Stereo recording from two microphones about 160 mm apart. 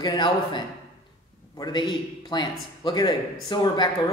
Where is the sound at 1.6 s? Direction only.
30° left (ahead or behind).